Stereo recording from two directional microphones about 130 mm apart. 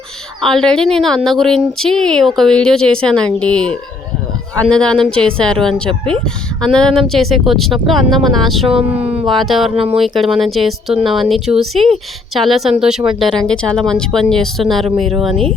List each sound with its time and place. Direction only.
0.4 s a woman's voice: 5° left (ahead or behind)
8.6 s speech: 45° right (ahead or behind)
9.0 s howl: 50° right (ahead or behind)
9.2 s a woman's voice: centre (ahead or behind)